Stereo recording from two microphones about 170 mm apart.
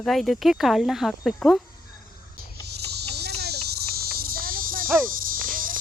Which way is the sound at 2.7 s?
75° right (ahead or behind).